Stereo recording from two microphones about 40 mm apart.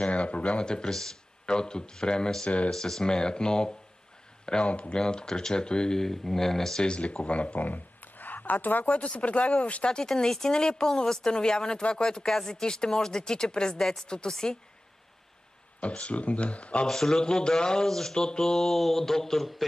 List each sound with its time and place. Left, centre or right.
0.0 s speech: left
0.7 s a woman's voice: centre
2.4 s speech: left
2.7 s a woman's voice: centre; by 4.9 s left
4.9 s a woman's voice: centre
5.9 s speech: centre
6.8 s speech: left
7.6 s a sound: left
8.9 s speech: left
9.8 s a woman's voice: centre
13.7 s speech: centre
14.0 s a woman's voice: centre
15.8 s speech: left
16.8 s speech: centre